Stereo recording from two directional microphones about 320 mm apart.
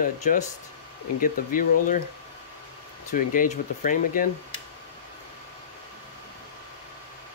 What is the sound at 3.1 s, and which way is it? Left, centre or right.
Speech, left.